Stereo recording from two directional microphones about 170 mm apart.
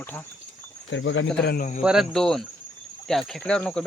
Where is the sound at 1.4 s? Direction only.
70° left (ahead or behind).